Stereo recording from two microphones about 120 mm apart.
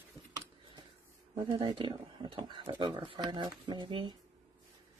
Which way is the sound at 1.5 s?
40° right (ahead or behind).